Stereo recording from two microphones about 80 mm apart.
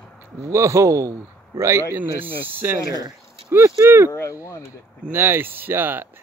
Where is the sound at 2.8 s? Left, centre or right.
Left.